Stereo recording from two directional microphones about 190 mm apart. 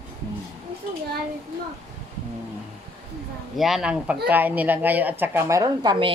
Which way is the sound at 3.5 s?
Centre (ahead or behind).